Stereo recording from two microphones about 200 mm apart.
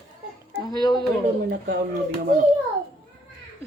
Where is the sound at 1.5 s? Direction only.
55° right (ahead or behind).